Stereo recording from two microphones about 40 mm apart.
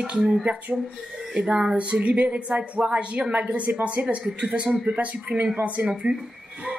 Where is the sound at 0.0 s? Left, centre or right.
Right.